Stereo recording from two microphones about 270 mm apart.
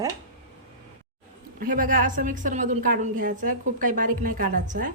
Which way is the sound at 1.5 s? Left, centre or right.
Right.